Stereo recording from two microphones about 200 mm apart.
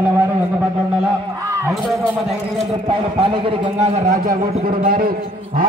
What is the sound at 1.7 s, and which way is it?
Speech, centre (ahead or behind).